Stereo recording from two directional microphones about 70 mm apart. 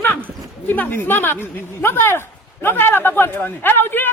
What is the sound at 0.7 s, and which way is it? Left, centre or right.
A woman's voice, left.